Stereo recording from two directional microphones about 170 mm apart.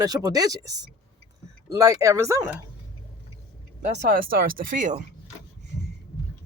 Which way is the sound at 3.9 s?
50° right (ahead or behind).